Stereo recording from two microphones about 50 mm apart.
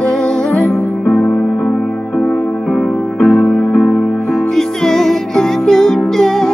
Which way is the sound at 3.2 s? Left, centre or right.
Left.